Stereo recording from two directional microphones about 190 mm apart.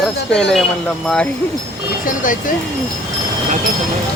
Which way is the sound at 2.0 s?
45° left (ahead or behind).